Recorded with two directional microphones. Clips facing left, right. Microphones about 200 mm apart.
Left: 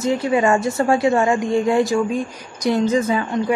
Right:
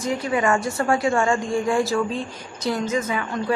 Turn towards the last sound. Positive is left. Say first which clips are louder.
# left 6 dB
turn(degrees=30)  # may be behind; listen again after turning